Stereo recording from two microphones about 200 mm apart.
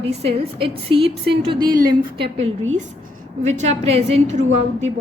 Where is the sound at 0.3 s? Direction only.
30° right (ahead or behind).